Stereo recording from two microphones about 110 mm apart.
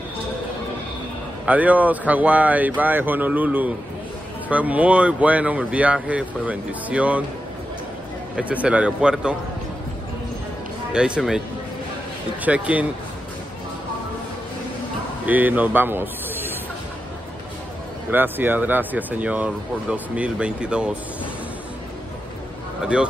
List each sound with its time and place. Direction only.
1.4 s speech: 15° right (ahead or behind)
8.6 s speech: 10° right (ahead or behind)
10.9 s speech: 5° right (ahead or behind)
12.4 s speech: 10° right (ahead or behind)
15.2 s speech: 15° right (ahead or behind)
18.1 s speech: 15° right (ahead or behind)